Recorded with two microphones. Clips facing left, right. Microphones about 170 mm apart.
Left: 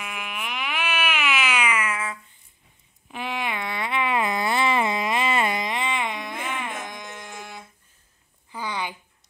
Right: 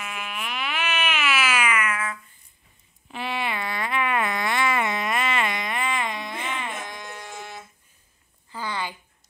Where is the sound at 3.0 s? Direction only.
15° left (ahead or behind); by 5.7 s 35° left (ahead or behind).